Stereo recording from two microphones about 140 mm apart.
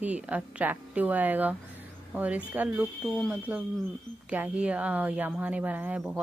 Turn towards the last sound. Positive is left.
turn(degrees=-10)  # may be behind; listen again after turning